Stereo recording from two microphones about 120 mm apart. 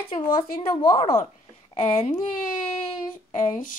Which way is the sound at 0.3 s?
40° left (ahead or behind).